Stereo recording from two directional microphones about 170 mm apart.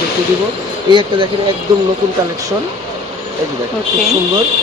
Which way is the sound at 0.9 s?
30° right (ahead or behind).